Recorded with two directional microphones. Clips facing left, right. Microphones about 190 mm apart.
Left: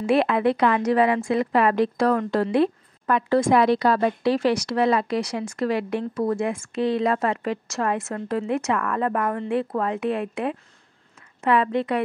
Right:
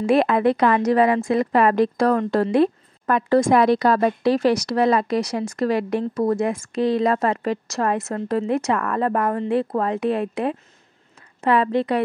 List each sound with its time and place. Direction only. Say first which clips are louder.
0.0 s a woman's voice: right 2 dB; 45° right (ahead or behind)